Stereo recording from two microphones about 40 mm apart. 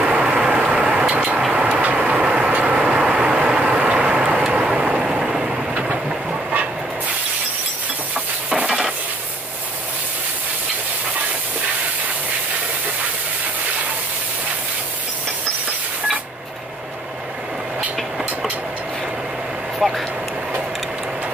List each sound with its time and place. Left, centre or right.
0.0 s vehicle: right
0.6 s a sound: right
1.0 s a sound: right
1.8 s vehicle: right
3.0 s vehicle: right
19.8 s vehicle: centre